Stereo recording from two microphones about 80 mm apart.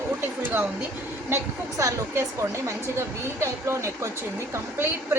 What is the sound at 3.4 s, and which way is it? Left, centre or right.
Speech, right.